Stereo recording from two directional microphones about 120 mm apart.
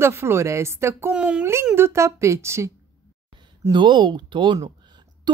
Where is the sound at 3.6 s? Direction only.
40° right (ahead or behind).